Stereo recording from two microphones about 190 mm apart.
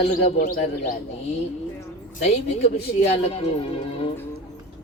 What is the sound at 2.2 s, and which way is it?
Speech, 35° left (ahead or behind).